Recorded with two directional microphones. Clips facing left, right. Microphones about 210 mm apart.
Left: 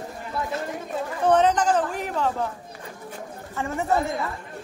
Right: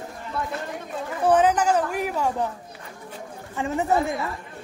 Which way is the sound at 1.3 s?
10° right (ahead or behind).